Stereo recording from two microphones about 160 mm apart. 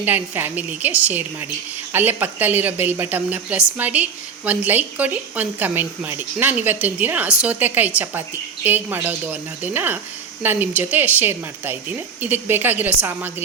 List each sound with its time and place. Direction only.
0.0 s a woman's voice: 10° right (ahead or behind)